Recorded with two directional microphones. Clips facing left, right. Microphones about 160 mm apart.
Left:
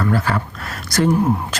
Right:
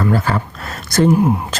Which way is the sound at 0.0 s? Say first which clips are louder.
Right 2 dB; 25° right (ahead or behind).